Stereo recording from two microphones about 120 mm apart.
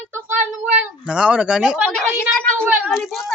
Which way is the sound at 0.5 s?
5° right (ahead or behind).